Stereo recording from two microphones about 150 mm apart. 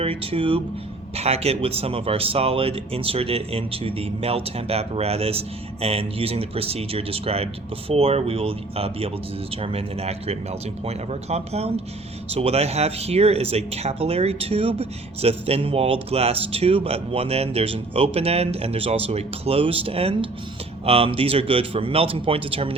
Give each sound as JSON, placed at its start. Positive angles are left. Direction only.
{"t": 0.0, "sound": "a man's voice", "side_deg": -40}